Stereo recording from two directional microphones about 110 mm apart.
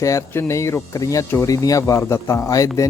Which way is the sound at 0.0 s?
30° left (ahead or behind).